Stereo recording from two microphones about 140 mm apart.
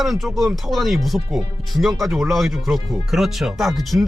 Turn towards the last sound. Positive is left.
turn(degrees=0)  # may be behind; listen again after turning